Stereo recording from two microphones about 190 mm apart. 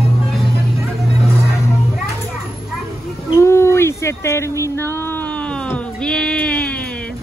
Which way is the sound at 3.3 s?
15° left (ahead or behind).